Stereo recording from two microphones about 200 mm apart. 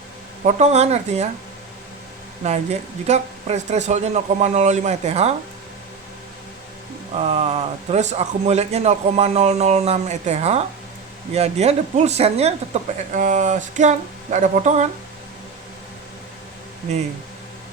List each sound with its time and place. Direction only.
0.4 s a man's voice: 35° right (ahead or behind)
2.4 s a man's voice: 35° right (ahead or behind)
7.1 s a man's voice: 30° right (ahead or behind)